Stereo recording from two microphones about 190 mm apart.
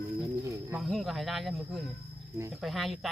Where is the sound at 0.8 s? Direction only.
Centre (ahead or behind).